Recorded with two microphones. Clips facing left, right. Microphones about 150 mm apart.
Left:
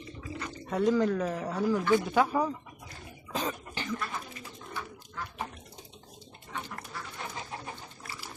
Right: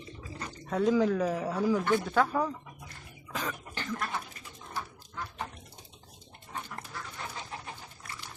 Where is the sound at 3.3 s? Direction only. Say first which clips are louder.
Left 3 dB; 20° left (ahead or behind).